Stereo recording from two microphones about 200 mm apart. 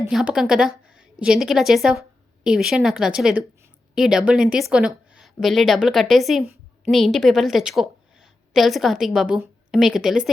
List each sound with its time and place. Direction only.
0.1 s a woman's voice: centre (ahead or behind)